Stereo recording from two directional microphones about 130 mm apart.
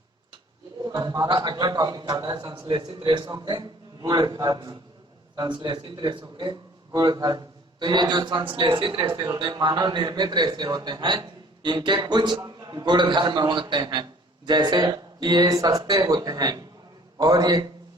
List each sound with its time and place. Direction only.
0.9 s a man's voice: 30° right (ahead or behind)